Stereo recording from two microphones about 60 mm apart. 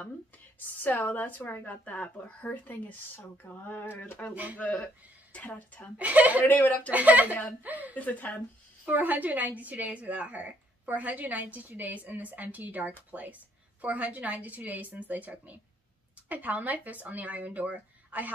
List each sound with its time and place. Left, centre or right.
0.7 s a woman's voice: left
3.2 s a sound: left
4.8 s speech: left
5.9 s a woman's voice: right
6.4 s a woman's voice: left
6.9 s a woman's voice: right
7.9 s a woman's voice: left
8.8 s a woman's voice: right